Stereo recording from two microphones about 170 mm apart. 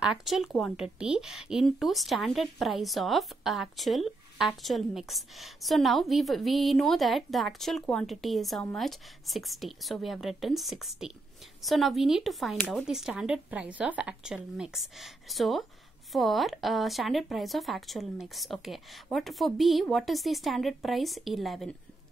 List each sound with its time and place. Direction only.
0.0 s speech: 5° right (ahead or behind)
12.5 s speech: 10° left (ahead or behind)
12.8 s speech: 5° right (ahead or behind)